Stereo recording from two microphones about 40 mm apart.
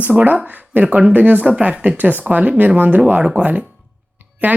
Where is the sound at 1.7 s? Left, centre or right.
Right.